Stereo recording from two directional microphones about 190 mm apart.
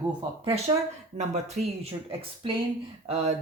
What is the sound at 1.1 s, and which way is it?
Speech, 40° right (ahead or behind).